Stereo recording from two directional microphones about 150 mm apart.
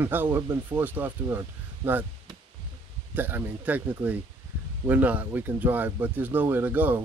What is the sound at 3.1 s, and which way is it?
Speech, 15° right (ahead or behind).